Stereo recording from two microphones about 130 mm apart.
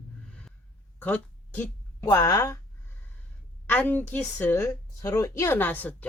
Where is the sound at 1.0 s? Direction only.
15° left (ahead or behind).